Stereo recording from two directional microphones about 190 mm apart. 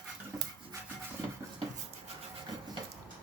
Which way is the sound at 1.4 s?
15° right (ahead or behind).